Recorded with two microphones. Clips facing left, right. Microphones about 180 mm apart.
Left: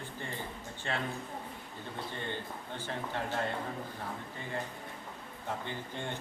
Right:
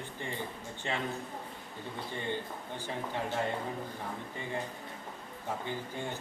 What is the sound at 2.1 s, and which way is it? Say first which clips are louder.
Speech: right 6 dB; 15° right (ahead or behind).